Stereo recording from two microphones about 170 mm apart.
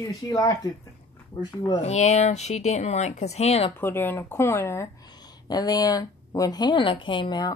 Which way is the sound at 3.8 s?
15° left (ahead or behind).